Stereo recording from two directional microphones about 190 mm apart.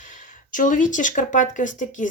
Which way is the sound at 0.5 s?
45° left (ahead or behind).